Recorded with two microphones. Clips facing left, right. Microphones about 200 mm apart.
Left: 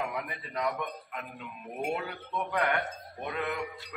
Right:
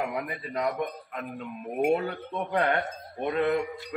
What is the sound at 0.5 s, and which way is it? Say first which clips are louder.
Speech: right 4 dB; 35° right (ahead or behind).